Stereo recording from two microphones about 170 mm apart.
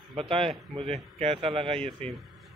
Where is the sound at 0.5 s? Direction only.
Centre (ahead or behind).